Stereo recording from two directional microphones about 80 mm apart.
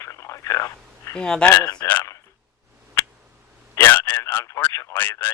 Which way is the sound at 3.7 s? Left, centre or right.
Left.